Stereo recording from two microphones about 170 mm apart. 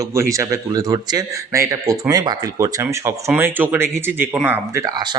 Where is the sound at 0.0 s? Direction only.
20° right (ahead or behind).